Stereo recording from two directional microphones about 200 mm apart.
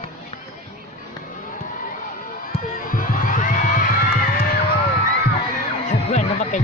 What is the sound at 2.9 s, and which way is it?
Music, 40° left (ahead or behind).